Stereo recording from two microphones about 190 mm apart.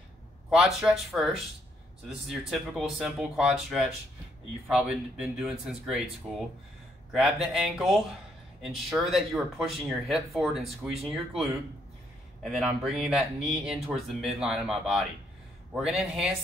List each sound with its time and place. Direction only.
0.5 s speech: centre (ahead or behind)
12.4 s speech: centre (ahead or behind)